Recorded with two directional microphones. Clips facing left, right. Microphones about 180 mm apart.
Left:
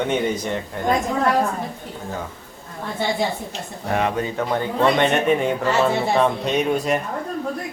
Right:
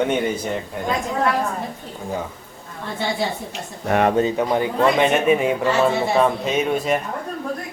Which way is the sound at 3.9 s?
55° right (ahead or behind).